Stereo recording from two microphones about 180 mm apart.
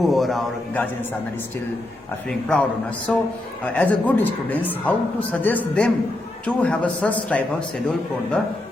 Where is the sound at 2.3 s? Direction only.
5° left (ahead or behind).